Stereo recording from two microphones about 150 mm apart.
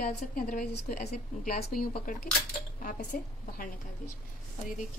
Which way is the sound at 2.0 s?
65° left (ahead or behind).